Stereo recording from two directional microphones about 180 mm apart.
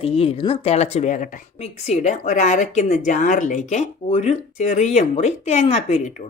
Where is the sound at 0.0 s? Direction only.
35° left (ahead or behind).